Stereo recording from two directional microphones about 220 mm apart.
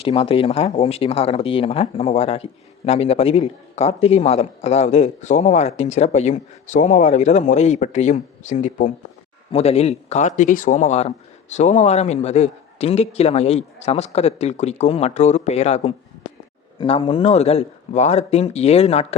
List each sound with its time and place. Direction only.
0.0 s speech: 25° left (ahead or behind)